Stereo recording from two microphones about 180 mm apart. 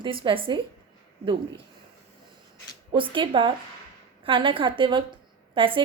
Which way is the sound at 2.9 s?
25° right (ahead or behind).